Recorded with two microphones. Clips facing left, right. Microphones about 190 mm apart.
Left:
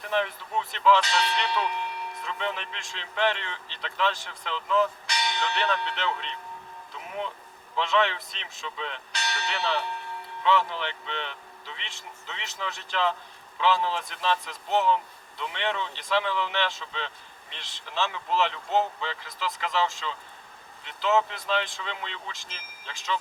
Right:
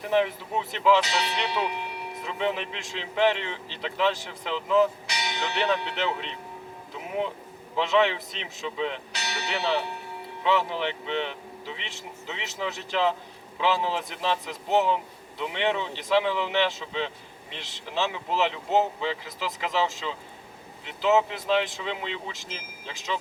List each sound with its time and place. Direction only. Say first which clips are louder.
0.0 s speech: right 4 dB; 5° right (ahead or behind)
6.9 s boat: right 5 dB; 10° right (ahead or behind)
7.8 s speech: right 3 dB; 5° right (ahead or behind)